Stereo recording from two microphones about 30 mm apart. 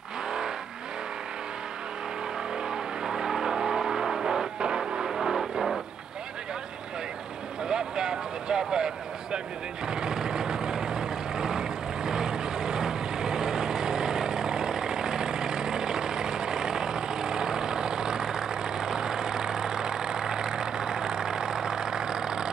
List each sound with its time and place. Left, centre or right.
2.7 s vehicle: centre
4.6 s music: right
5.0 s a sound: centre
7.6 s speech: right
9.8 s vehicle: right